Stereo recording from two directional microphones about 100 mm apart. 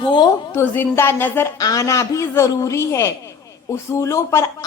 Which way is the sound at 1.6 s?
35° left (ahead or behind).